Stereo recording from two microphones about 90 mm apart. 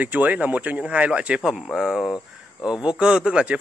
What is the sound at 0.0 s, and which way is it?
Speech, 15° right (ahead or behind).